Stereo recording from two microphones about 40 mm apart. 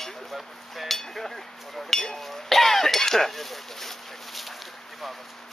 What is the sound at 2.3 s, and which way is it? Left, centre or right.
Chink, centre.